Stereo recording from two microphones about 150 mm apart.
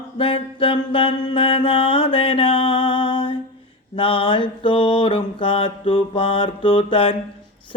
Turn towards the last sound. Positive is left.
turn(degrees=35)  # may be behind; listen again after turning